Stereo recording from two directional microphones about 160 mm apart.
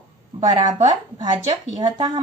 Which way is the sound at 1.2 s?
25° right (ahead or behind).